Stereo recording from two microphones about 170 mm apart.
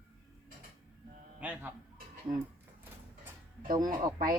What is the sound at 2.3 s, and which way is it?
Speech, 25° right (ahead or behind).